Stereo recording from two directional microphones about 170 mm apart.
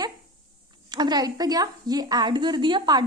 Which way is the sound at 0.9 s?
25° right (ahead or behind).